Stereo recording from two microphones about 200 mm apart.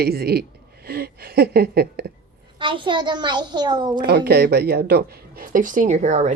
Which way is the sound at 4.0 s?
55° right (ahead or behind).